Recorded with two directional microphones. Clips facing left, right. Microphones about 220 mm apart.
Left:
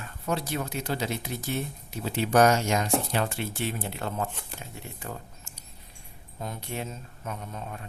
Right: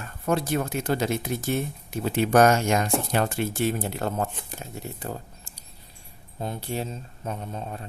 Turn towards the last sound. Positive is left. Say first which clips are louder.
# right 4 dB
turn(degrees=-30)  # may be behind; listen again after turning